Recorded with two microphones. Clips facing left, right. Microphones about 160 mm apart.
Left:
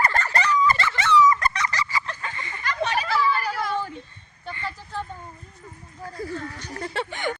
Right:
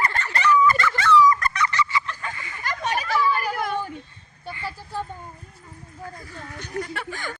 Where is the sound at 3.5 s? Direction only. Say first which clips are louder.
Right 1 dB; 55° right (ahead or behind).